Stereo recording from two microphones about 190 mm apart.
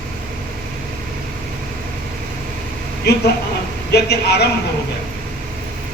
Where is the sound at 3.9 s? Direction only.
60° left (ahead or behind).